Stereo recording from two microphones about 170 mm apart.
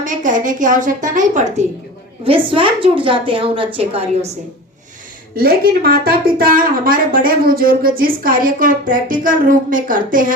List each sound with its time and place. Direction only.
0.0 s a woman's voice: 50° right (ahead or behind)
2.2 s a woman's voice: 30° right (ahead or behind)
5.4 s a woman's voice: 60° right (ahead or behind)